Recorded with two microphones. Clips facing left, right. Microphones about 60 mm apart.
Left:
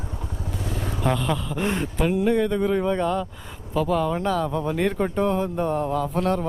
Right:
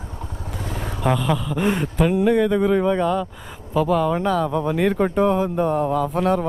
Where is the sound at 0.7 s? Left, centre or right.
Centre.